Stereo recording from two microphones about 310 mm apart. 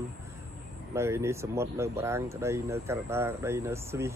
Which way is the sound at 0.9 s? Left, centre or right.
Centre.